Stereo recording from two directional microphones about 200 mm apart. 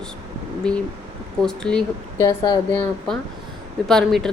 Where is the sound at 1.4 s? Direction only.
5° left (ahead or behind).